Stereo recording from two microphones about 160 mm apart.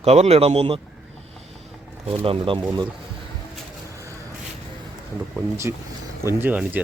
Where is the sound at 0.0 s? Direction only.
40° right (ahead or behind).